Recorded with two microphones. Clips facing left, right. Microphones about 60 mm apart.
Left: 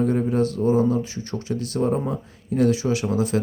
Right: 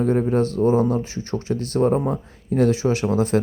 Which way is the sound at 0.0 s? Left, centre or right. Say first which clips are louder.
Right 2 dB; right.